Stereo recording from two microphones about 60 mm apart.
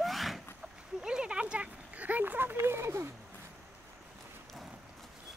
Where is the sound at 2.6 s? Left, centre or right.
Right.